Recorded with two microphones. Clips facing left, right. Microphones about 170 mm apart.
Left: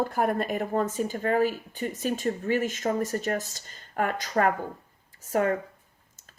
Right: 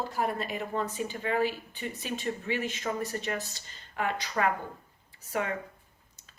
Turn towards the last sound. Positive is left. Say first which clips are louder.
# left 7 dB
turn(degrees=45)  # may be behind; listen again after turning